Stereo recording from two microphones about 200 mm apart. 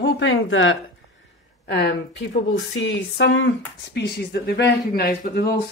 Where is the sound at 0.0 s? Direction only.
70° left (ahead or behind).